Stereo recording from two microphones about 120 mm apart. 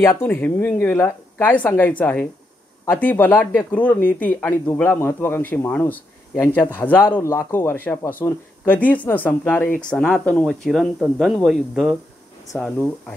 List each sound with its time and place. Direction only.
0.0 s speech: 20° left (ahead or behind); by 12.0 s centre (ahead or behind)
12.5 s speech: 15° left (ahead or behind)